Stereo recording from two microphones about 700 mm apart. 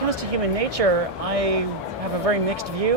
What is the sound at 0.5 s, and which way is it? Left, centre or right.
Speech, right.